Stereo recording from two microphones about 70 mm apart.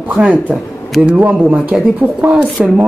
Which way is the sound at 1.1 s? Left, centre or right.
Right.